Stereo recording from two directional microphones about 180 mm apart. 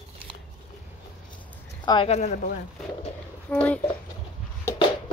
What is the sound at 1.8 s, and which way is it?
Speech, 30° left (ahead or behind).